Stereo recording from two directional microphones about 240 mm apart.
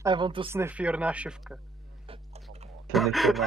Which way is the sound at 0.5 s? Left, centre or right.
Centre.